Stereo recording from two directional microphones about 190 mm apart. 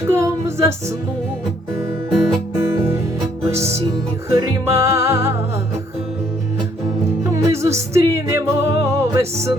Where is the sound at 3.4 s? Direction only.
15° right (ahead or behind).